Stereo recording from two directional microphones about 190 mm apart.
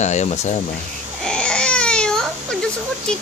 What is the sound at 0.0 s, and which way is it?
Speech, 35° left (ahead or behind).